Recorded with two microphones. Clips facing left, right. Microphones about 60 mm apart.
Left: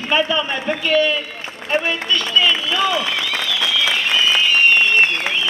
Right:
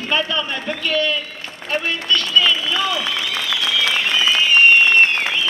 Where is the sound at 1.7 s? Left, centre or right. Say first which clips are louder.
Left 1 dB; centre.